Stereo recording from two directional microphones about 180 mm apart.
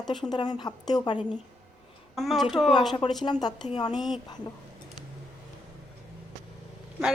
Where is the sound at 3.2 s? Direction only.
25° left (ahead or behind).